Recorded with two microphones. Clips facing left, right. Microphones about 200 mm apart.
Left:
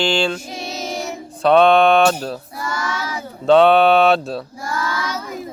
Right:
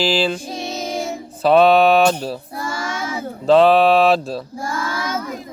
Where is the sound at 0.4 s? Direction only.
30° right (ahead or behind).